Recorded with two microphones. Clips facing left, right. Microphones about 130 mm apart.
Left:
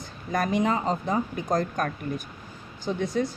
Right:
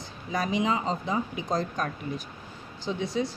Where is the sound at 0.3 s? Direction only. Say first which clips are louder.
Left 2 dB; 55° left (ahead or behind).